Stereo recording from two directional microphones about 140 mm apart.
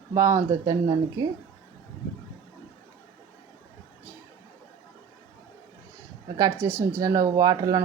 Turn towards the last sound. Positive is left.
turn(degrees=-25)  # may be behind; listen again after turning